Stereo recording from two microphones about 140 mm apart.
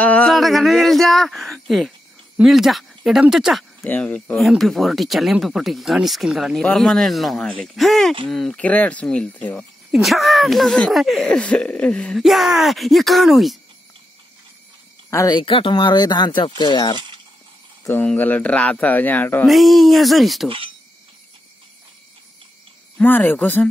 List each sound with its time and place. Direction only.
0.0 s a sound: 10° left (ahead or behind)
0.3 s speech: centre (ahead or behind)
3.8 s speech: 10° left (ahead or behind)
9.9 s speech: centre (ahead or behind)
15.0 s speech: 25° left (ahead or behind)
17.8 s speech: 15° left (ahead or behind)
19.4 s speech: centre (ahead or behind)
20.4 s speech: 40° right (ahead or behind)
22.9 s speech: 15° left (ahead or behind)